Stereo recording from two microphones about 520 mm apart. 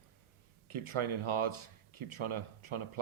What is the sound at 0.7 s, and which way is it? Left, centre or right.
Speech, right.